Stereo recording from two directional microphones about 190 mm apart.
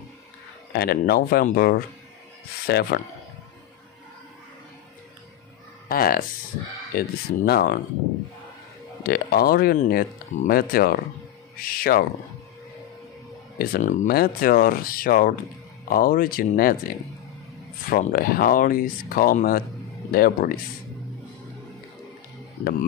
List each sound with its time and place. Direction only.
0.7 s speech: 55° left (ahead or behind)
5.9 s speech: 50° left (ahead or behind)
9.0 s speech: 50° left (ahead or behind)
13.6 s speech: 50° left (ahead or behind)